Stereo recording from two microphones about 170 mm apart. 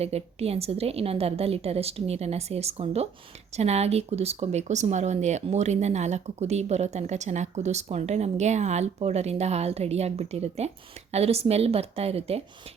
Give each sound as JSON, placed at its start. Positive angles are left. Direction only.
{"t": 0.0, "sound": "speech", "side_deg": -35}